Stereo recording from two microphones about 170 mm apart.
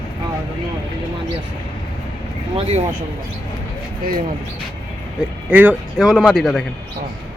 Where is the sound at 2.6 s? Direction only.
35° right (ahead or behind).